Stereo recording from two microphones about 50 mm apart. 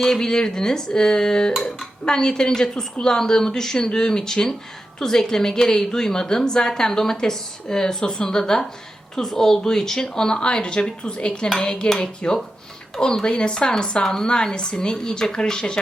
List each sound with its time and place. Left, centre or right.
0.0 s a woman's voice: centre
11.6 s dishes: left
13.0 s a woman's voice: centre